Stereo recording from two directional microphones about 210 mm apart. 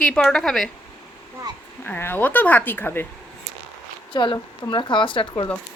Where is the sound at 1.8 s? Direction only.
10° left (ahead or behind).